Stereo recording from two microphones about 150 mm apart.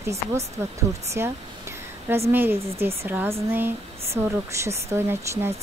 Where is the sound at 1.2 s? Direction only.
15° right (ahead or behind).